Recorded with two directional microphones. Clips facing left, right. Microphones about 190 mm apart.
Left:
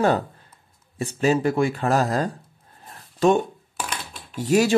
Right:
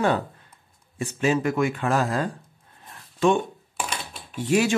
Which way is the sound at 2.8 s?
35° left (ahead or behind).